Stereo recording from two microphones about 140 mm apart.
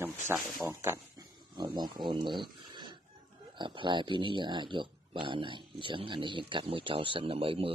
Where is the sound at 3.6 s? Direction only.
35° right (ahead or behind).